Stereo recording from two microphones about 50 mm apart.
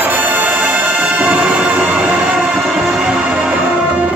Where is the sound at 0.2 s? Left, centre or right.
Right.